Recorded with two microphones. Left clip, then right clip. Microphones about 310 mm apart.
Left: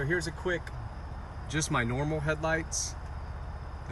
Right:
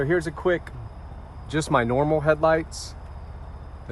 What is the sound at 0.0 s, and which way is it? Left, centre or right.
Speech, right.